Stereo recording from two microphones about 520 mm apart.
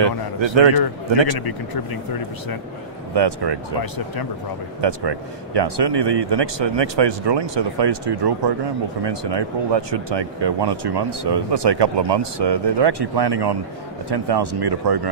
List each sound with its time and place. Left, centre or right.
0.6 s a man's voice: right
3.2 s speech: right
4.8 s speech: right